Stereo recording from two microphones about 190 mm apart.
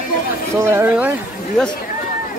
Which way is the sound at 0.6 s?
10° right (ahead or behind).